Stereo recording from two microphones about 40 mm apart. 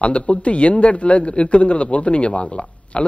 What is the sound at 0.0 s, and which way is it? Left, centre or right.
A man's voice, left.